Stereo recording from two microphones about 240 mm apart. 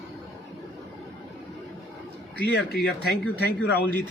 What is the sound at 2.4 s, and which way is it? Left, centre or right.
Speech, left.